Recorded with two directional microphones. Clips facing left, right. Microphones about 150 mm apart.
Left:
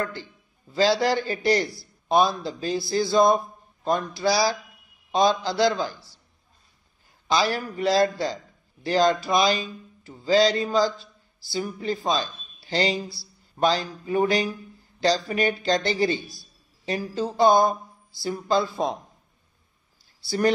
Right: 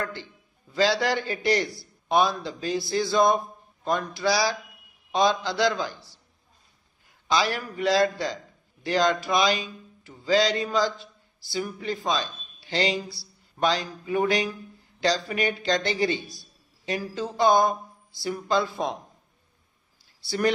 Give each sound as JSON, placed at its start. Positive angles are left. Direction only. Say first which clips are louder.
{"t": 0.7, "sound": "speech", "louder": "left 2 dB", "side_deg": 35}
{"t": 7.2, "sound": "speech", "louder": "left 2 dB", "side_deg": 35}
{"t": 20.2, "sound": "speech", "louder": "left 2 dB", "side_deg": 35}